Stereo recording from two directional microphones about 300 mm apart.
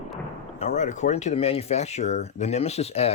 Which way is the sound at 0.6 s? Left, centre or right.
Left.